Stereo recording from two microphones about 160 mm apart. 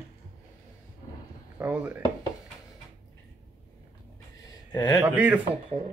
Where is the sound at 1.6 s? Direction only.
10° right (ahead or behind).